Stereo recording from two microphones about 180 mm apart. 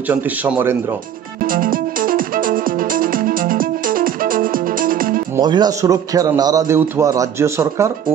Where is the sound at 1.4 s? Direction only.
50° right (ahead or behind).